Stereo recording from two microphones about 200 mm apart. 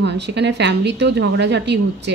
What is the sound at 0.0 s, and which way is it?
A woman's voice, 60° right (ahead or behind).